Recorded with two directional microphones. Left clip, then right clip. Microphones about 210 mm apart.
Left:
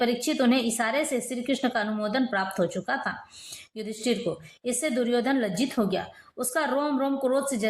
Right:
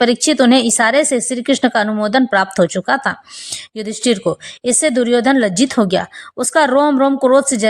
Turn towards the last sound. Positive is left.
turn(degrees=-35)  # may be behind; listen again after turning